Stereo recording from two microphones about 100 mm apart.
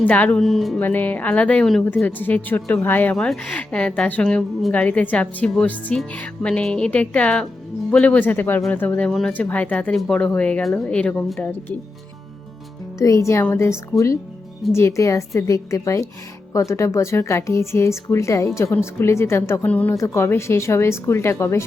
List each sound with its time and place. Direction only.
0.0 s a woman's voice: 15° left (ahead or behind)
0.3 s speech: centre (ahead or behind)
0.8 s a woman's voice: 20° left (ahead or behind)
13.0 s a woman's voice: 30° left (ahead or behind)
19.6 s a woman's voice: 15° left (ahead or behind)
19.9 s speech: 30° left (ahead or behind)